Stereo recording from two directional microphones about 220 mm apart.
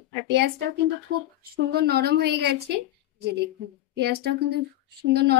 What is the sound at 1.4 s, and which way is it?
Speech, 45° right (ahead or behind).